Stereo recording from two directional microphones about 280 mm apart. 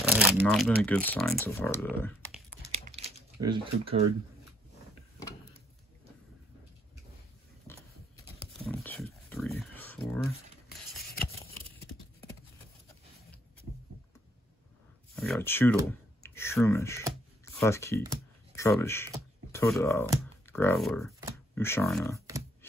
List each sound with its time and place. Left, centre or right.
0.1 s speech: centre
2.9 s typing: right
7.7 s a sound: centre
10.7 s scissors: centre
15.1 s speech: centre